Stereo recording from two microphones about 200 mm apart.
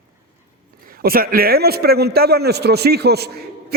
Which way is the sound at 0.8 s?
45° right (ahead or behind).